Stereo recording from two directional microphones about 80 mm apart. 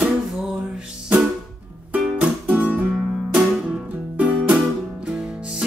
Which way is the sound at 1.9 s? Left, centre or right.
Centre.